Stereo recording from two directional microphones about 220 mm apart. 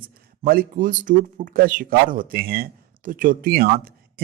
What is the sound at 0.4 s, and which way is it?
Speech, 40° right (ahead or behind).